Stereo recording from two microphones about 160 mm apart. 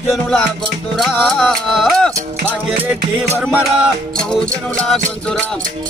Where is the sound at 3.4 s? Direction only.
Centre (ahead or behind).